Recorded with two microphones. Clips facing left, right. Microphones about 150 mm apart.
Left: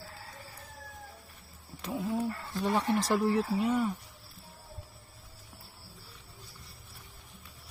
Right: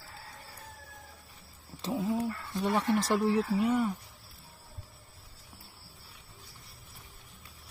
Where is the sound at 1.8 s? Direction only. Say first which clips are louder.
Right 3 dB; 25° right (ahead or behind).